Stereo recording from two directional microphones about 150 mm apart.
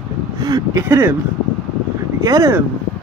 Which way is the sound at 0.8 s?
15° right (ahead or behind).